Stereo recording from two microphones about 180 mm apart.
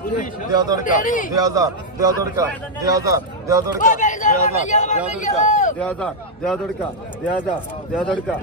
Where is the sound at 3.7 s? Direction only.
50° left (ahead or behind).